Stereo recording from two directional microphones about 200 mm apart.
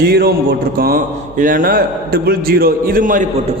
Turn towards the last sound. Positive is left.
turn(degrees=-40)  # may be behind; listen again after turning